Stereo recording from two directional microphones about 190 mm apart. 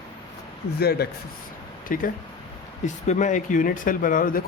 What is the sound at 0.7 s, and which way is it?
A man's voice, 55° left (ahead or behind).